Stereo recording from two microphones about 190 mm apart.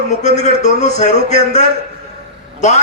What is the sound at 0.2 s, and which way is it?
A man's voice, 35° left (ahead or behind).